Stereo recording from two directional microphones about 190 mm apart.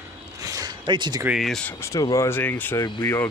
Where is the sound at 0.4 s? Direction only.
20° right (ahead or behind).